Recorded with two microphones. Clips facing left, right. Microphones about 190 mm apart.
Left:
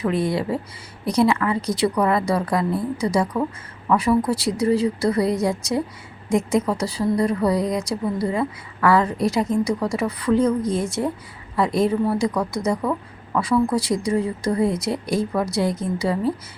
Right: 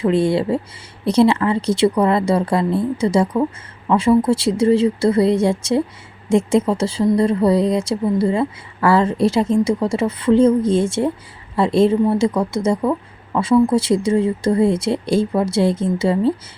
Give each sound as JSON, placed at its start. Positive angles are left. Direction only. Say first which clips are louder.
{"t": 0.0, "sound": "speech", "louder": "right 5 dB", "side_deg": -25}